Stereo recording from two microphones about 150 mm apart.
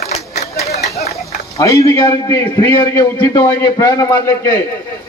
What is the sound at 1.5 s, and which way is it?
A man's voice, 20° left (ahead or behind).